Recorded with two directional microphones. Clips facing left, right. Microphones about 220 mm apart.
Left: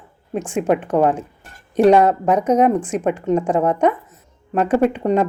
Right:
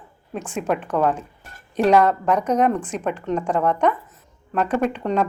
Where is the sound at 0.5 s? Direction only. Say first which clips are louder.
Left 6 dB; 15° left (ahead or behind).